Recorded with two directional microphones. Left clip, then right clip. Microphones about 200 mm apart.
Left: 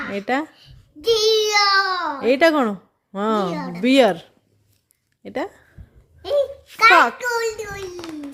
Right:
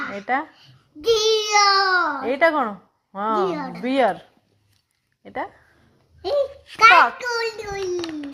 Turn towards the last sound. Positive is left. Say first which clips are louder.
# left 2 dB
turn(degrees=20)  # may be behind; listen again after turning